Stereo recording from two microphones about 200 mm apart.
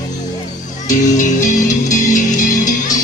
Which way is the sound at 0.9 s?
40° left (ahead or behind).